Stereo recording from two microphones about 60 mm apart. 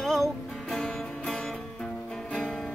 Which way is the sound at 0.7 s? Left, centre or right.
Left.